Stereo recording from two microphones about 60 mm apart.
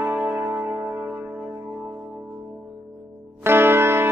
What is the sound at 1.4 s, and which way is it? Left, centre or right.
Music, right.